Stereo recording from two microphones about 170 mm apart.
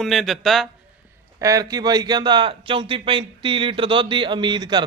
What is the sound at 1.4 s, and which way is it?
Speech, 20° right (ahead or behind).